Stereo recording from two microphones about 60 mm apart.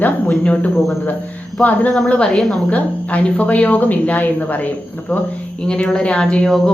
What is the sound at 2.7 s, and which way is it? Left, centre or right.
A woman's voice, left.